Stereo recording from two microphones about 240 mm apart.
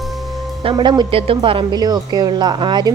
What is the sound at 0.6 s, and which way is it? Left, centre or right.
Speech, centre.